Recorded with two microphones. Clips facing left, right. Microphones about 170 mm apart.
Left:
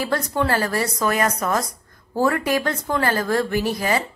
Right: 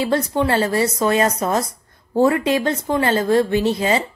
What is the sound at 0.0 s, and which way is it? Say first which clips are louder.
A woman's voice: right 4 dB; 25° right (ahead or behind).